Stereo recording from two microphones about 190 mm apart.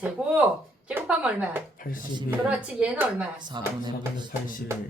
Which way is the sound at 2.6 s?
5° right (ahead or behind).